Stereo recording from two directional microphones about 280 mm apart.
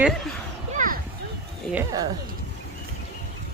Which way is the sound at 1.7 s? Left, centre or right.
Centre.